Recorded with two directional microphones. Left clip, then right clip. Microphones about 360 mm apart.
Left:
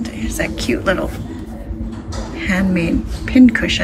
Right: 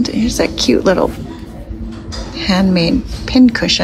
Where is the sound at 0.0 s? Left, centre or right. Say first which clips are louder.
Right 7 dB; centre.